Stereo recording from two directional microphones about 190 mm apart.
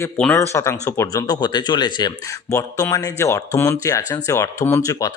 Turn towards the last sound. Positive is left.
turn(degrees=15)  # may be behind; listen again after turning